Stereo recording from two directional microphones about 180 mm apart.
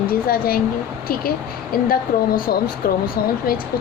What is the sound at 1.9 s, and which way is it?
A woman's voice, 55° left (ahead or behind).